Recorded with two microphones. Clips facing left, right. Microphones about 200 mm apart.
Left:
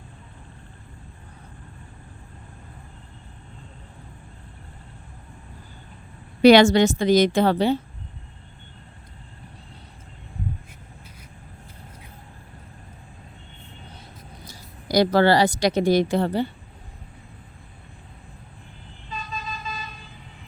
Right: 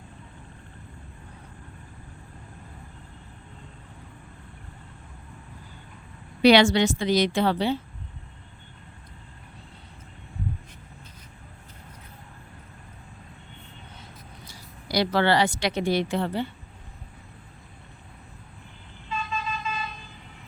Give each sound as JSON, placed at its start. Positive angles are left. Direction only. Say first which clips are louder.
{"t": 6.4, "sound": "a woman's voice", "louder": "left 4 dB", "side_deg": 45}
{"t": 14.4, "sound": "speech", "louder": "left 6 dB", "side_deg": 45}
{"t": 19.0, "sound": "vehicle", "louder": "right 3 dB", "side_deg": 40}